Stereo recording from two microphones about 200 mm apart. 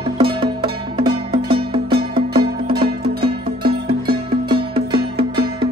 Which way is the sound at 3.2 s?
50° right (ahead or behind).